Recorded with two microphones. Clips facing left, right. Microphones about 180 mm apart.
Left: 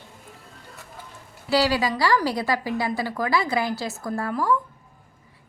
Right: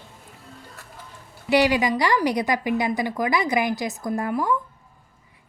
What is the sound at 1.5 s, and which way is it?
A woman's voice, 20° right (ahead or behind).